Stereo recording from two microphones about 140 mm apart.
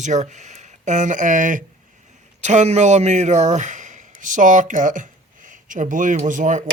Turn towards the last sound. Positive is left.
turn(degrees=-65)  # may be behind; listen again after turning